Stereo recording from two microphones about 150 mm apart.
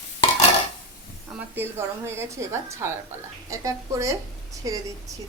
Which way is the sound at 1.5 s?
15° right (ahead or behind).